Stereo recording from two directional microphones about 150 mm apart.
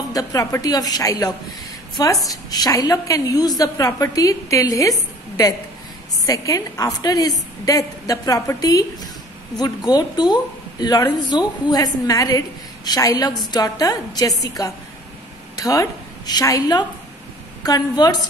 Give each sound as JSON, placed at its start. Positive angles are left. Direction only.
{"t": 0.1, "sound": "a woman's voice", "side_deg": 25}
{"t": 6.2, "sound": "a woman's voice", "side_deg": 25}